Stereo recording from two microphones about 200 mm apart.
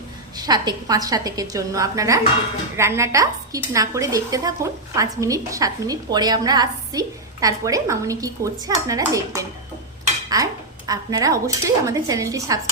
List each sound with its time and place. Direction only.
0.3 s speech: 20° right (ahead or behind)